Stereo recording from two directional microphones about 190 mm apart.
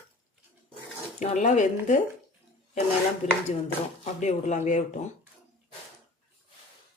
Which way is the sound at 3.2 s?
40° left (ahead or behind).